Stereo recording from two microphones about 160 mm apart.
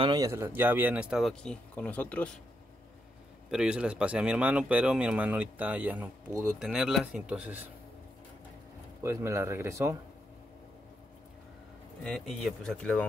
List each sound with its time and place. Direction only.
0.0 s speech: 25° right (ahead or behind); by 2.3 s 10° left (ahead or behind)
3.4 s speech: 5° right (ahead or behind)
9.0 s speech: 15° right (ahead or behind)
12.0 s speech: centre (ahead or behind)